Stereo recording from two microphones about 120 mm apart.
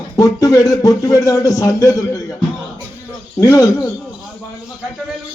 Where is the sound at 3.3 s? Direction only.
25° left (ahead or behind).